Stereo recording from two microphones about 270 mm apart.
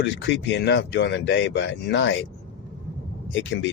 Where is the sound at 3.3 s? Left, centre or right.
Left.